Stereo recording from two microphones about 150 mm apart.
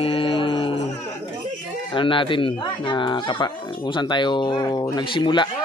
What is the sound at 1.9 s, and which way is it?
Speech, 35° left (ahead or behind).